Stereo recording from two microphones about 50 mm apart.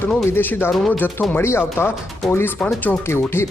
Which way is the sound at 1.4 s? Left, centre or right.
Left.